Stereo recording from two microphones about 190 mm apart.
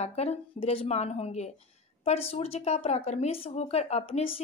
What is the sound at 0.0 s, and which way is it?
A woman's voice, 35° left (ahead or behind).